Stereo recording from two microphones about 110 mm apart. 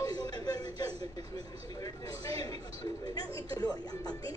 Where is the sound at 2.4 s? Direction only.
35° left (ahead or behind).